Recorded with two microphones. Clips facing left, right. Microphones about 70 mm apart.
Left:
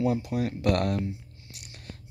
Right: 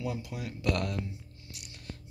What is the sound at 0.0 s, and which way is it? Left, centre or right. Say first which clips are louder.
Speech: left 10 dB; left.